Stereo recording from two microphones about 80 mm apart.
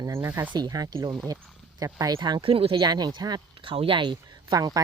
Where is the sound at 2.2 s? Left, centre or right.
Right.